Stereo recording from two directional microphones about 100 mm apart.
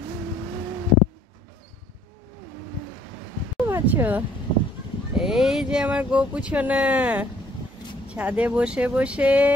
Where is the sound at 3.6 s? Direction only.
20° right (ahead or behind).